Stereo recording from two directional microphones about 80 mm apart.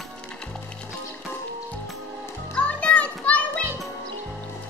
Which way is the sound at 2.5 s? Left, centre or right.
Centre.